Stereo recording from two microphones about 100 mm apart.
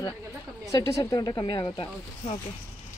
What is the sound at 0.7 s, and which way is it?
Speech, 35° left (ahead or behind).